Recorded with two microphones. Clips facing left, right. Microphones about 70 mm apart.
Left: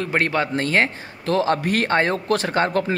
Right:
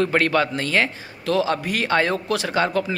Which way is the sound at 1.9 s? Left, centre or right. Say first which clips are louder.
Left 1 dB; left.